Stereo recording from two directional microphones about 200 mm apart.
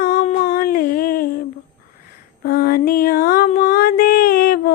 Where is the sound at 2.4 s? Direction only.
50° left (ahead or behind).